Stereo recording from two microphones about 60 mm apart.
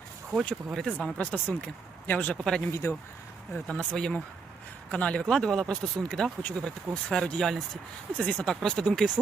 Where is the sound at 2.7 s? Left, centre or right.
Left.